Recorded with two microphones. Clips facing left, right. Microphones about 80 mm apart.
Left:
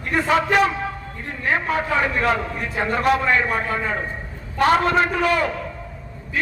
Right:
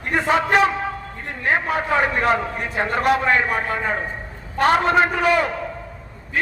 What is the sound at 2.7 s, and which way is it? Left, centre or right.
A man's voice, right.